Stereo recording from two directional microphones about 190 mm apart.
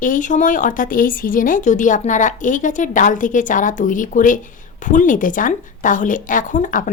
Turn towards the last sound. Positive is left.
turn(degrees=45)  # may be behind; listen again after turning